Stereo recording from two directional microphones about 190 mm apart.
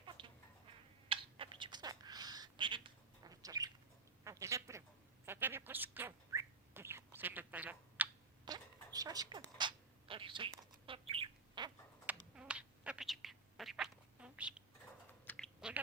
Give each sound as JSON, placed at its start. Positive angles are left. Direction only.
{"t": 0.0, "sound": "chicken", "side_deg": -25}
{"t": 1.0, "sound": "a sound", "side_deg": -30}
{"t": 5.2, "sound": "bird", "side_deg": -10}
{"t": 8.4, "sound": "a sound", "side_deg": -20}
{"t": 9.6, "sound": "bird", "side_deg": -25}
{"t": 12.4, "sound": "duck", "side_deg": -5}
{"t": 15.3, "sound": "chewing", "side_deg": 10}